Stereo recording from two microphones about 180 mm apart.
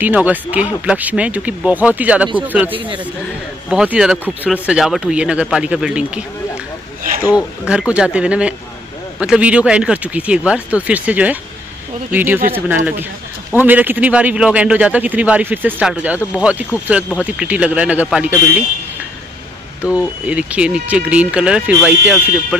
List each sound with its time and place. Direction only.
0.0 s a man's voice: 10° right (ahead or behind)
2.7 s speech: 30° right (ahead or behind)
3.7 s speech: 5° right (ahead or behind)
7.6 s a man's voice: 5° right (ahead or behind)
19.8 s a man's voice: 5° right (ahead or behind)